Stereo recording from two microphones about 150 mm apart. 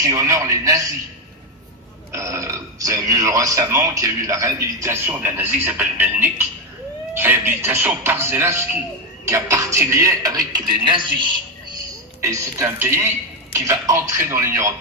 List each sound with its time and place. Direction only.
0.0 s speech: 20° right (ahead or behind)
2.1 s speech: 20° right (ahead or behind)
12.2 s speech: 20° right (ahead or behind)